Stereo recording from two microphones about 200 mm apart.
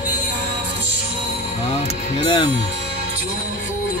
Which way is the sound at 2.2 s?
20° left (ahead or behind).